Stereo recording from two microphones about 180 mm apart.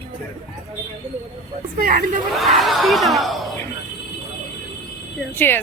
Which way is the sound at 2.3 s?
Centre (ahead or behind).